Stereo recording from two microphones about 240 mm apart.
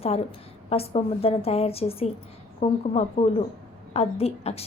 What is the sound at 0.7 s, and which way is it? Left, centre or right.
A woman's voice, left.